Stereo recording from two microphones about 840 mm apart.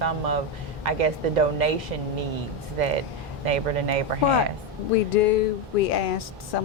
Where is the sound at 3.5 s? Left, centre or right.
Right.